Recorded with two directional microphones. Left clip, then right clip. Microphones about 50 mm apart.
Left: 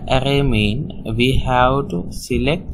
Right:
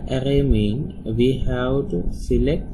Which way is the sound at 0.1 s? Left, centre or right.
Left.